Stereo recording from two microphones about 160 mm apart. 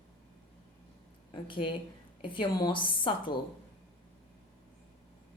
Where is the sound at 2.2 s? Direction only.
30° left (ahead or behind).